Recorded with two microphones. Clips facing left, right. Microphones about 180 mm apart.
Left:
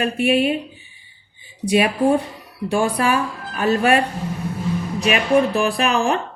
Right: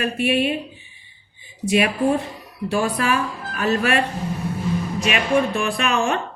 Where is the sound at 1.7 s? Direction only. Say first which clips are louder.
Left 2 dB; 30° left (ahead or behind).